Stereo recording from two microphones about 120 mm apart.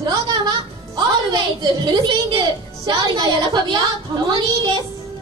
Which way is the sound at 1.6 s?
35° right (ahead or behind).